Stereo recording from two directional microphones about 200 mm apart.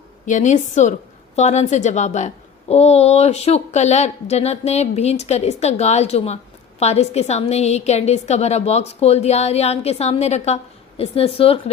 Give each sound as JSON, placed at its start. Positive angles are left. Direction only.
{"t": 0.3, "sound": "a woman's voice", "side_deg": 35}